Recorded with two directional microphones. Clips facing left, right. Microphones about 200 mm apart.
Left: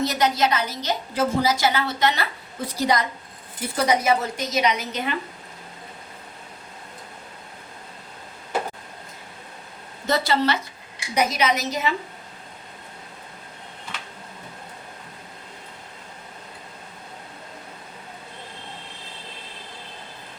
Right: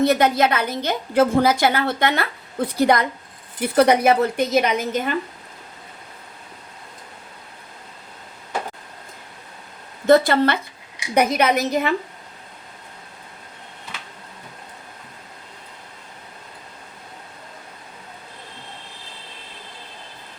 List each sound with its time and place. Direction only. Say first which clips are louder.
0.0 s a woman's voice: right 5 dB; 55° right (ahead or behind)
10.1 s a woman's voice: right 7 dB; 55° right (ahead or behind)